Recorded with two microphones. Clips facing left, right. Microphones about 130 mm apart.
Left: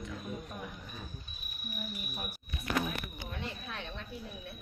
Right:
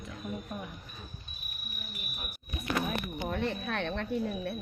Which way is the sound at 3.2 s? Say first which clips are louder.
Right 9 dB; 65° right (ahead or behind).